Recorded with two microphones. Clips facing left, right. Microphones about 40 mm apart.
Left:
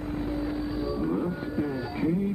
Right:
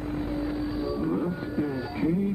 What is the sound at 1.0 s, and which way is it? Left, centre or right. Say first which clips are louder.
Music: even; centre.